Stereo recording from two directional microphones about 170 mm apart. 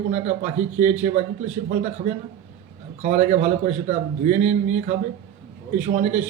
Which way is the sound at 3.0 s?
40° right (ahead or behind).